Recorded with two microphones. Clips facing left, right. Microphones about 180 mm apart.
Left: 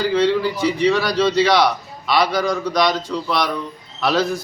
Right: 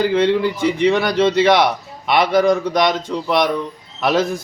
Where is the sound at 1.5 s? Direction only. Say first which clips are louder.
Right 1 dB; 55° right (ahead or behind).